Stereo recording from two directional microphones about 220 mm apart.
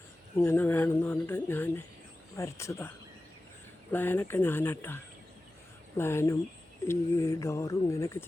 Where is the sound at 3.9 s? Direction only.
10° left (ahead or behind).